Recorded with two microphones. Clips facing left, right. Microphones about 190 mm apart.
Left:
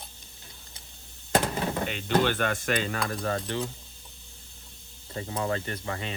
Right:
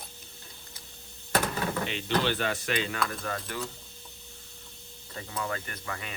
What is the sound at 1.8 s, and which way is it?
Speech, 50° left (ahead or behind).